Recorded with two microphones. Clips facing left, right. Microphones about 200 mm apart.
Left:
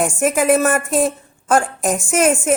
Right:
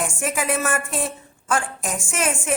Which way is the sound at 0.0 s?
40° left (ahead or behind).